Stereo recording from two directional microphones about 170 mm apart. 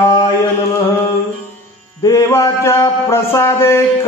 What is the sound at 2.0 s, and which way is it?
Speech, 20° left (ahead or behind).